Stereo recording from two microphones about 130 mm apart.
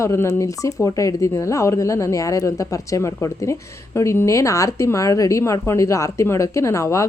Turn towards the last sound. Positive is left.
turn(degrees=25)  # may be behind; listen again after turning